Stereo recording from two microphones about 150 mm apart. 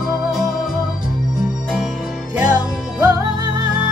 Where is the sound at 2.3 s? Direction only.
10° right (ahead or behind).